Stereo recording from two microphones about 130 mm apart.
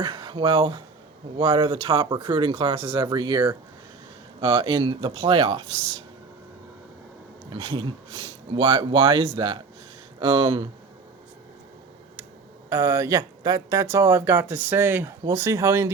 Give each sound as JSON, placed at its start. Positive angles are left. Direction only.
{"t": 0.0, "sound": "speech", "side_deg": -35}
{"t": 7.5, "sound": "speech", "side_deg": -35}
{"t": 12.7, "sound": "speech", "side_deg": -20}